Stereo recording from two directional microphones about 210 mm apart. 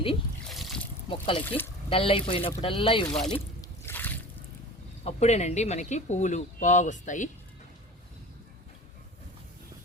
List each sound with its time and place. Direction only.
0.4 s trickle: centre (ahead or behind)
1.1 s speech: 25° left (ahead or behind)
2.6 s a sound: 25° left (ahead or behind); by 4.2 s 10° left (ahead or behind)
5.0 s speech: 30° left (ahead or behind)